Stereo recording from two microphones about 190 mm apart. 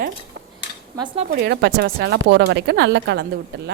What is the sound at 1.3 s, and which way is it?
A woman's voice, 55° right (ahead or behind).